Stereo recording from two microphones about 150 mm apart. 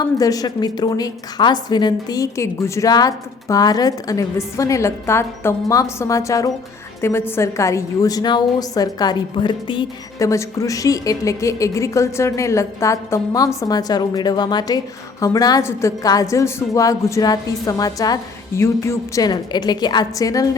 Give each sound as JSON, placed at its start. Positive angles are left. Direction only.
{"t": 0.0, "sound": "a woman's voice", "side_deg": 25}
{"t": 10.2, "sound": "a woman's voice", "side_deg": 20}